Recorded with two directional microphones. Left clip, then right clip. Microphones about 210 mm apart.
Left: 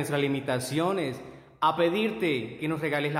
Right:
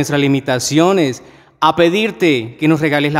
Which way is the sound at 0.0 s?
45° right (ahead or behind).